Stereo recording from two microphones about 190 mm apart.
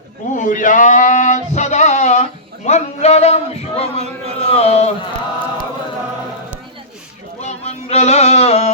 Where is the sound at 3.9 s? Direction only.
35° right (ahead or behind).